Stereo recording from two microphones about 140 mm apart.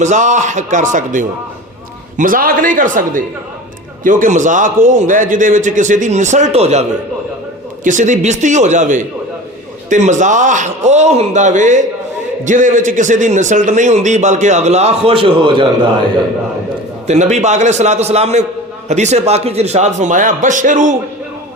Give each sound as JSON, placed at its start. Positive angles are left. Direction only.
{"t": 0.0, "sound": "a man's voice", "side_deg": -60}
{"t": 2.1, "sound": "a man's voice", "side_deg": -80}
{"t": 7.9, "sound": "a man's voice", "side_deg": -65}
{"t": 17.1, "sound": "a man's voice", "side_deg": -55}